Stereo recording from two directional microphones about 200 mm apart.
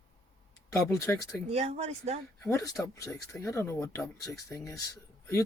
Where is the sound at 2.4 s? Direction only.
15° left (ahead or behind).